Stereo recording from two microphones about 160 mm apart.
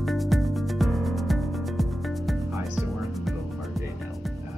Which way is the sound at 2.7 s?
Centre (ahead or behind).